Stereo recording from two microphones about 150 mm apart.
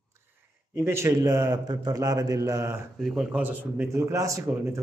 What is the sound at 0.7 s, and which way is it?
A man's voice, 20° right (ahead or behind).